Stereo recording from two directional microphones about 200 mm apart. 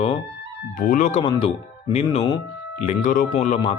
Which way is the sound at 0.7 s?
40° left (ahead or behind).